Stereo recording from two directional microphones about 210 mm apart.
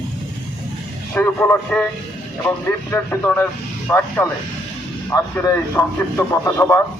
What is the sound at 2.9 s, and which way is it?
A man's voice, 10° left (ahead or behind).